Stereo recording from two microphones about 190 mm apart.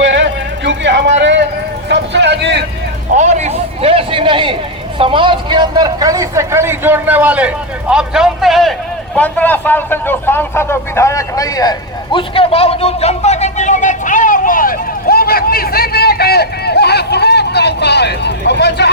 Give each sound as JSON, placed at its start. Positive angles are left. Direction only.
{"t": 0.0, "sound": "music", "side_deg": -75}
{"t": 1.9, "sound": "a sound", "side_deg": -65}
{"t": 3.2, "sound": "a man's voice", "side_deg": -35}